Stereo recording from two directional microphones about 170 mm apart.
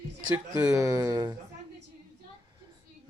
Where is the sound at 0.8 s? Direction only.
20° right (ahead or behind).